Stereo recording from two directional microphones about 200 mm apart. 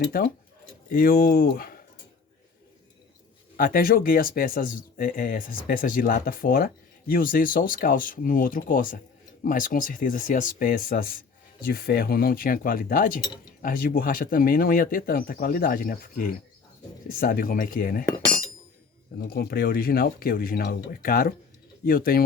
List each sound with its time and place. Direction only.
0.1 s speech: 45° left (ahead or behind)
3.6 s speech: 45° left (ahead or behind)
19.3 s speech: 50° left (ahead or behind)